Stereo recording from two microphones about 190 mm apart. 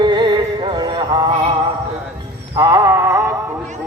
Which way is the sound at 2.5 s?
20° right (ahead or behind).